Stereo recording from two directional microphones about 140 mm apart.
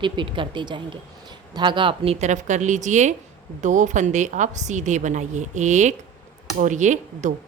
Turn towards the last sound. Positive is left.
turn(degrees=-60)  # may be behind; listen again after turning